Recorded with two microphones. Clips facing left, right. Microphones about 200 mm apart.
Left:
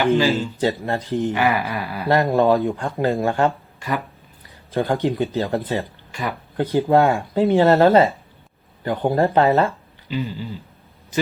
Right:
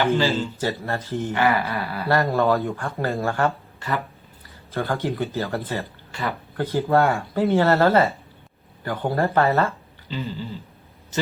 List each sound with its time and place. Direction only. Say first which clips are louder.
0.0 s speech: left 3 dB; 15° left (ahead or behind)